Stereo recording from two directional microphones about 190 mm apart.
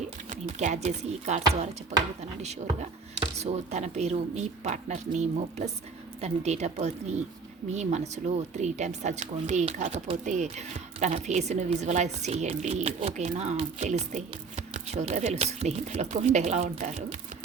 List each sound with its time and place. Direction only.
0.3 s a woman's voice: 40° right (ahead or behind)